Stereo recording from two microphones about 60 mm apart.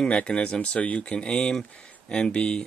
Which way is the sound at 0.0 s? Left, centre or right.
Centre.